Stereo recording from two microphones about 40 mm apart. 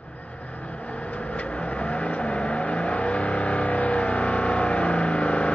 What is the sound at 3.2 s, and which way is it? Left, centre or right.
Vehicle, left.